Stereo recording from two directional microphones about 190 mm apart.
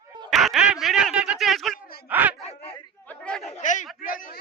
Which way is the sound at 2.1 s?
10° right (ahead or behind).